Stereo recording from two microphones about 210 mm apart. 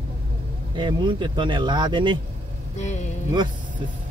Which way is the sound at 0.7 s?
20° right (ahead or behind).